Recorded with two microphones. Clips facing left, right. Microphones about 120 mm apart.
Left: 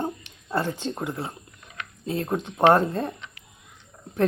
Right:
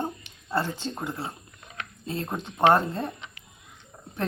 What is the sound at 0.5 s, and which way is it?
Speech, 15° left (ahead or behind).